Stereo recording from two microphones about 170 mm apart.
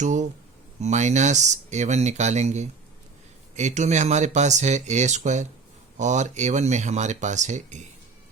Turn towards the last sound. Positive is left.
turn(degrees=-45)  # may be behind; listen again after turning